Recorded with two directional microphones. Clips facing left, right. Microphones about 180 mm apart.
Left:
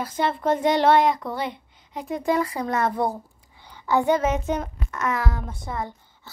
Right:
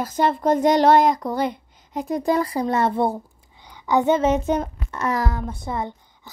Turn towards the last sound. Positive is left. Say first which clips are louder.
# right 3 dB
turn(degrees=-20)  # may be behind; listen again after turning